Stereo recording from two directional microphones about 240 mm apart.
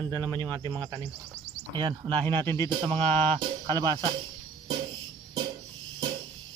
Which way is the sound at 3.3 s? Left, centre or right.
Centre.